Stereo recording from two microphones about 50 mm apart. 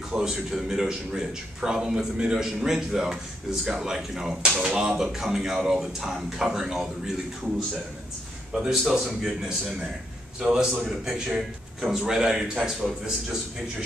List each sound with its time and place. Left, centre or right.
0.1 s speech: centre
8.5 s speech: centre
10.4 s a man's voice: centre
10.8 s speech: centre